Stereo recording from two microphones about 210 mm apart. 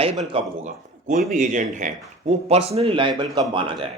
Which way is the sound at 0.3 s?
25° right (ahead or behind).